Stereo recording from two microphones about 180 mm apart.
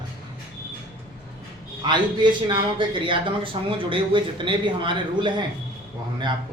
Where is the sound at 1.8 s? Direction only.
25° right (ahead or behind).